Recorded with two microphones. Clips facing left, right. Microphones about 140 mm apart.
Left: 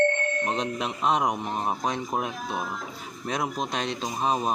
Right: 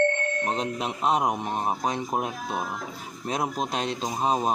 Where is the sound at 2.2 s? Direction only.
40° right (ahead or behind).